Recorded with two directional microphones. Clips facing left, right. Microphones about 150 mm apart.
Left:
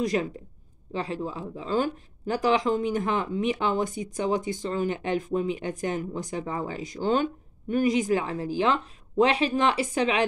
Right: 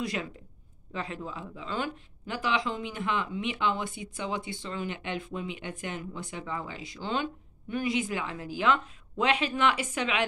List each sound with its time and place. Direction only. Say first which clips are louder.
0.0 s speech: left 7 dB; 40° left (ahead or behind)